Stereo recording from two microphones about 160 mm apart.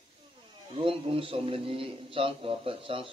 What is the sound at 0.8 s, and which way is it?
A man's voice, 35° right (ahead or behind).